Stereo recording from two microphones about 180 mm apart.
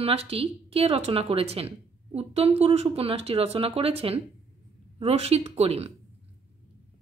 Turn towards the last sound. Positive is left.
turn(degrees=-35)  # may be behind; listen again after turning